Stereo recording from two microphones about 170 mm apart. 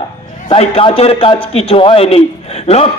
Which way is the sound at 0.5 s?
35° left (ahead or behind).